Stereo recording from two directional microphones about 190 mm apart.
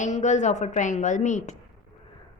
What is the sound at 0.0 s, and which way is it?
Speech, 40° left (ahead or behind).